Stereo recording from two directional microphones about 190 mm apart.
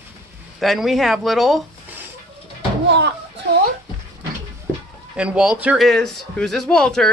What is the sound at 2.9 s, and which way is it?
Slam, 65° right (ahead or behind).